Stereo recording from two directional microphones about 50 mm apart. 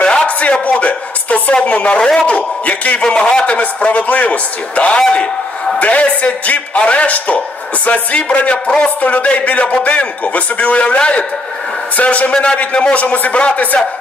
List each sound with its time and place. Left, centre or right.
0.0 s a sound: centre
2.0 s speech: centre
2.2 s a man's voice: left